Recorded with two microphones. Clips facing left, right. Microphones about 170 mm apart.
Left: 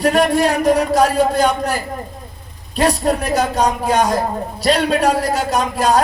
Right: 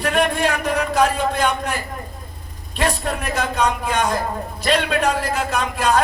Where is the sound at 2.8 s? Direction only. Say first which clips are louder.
Left 6 dB; 35° left (ahead or behind).